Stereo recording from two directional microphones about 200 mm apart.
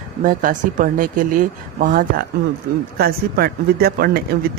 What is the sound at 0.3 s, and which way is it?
Speech, 40° right (ahead or behind).